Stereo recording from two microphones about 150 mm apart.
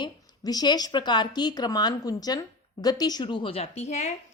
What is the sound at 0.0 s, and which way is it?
Speech, 25° left (ahead or behind).